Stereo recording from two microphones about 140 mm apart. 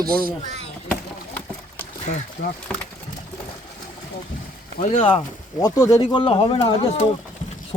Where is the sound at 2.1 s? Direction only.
90° left.